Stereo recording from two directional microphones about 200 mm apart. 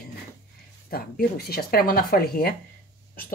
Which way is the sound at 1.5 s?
50° left (ahead or behind).